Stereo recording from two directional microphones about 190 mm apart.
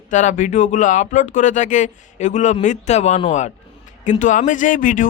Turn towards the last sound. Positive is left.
turn(degrees=45)  # may be behind; listen again after turning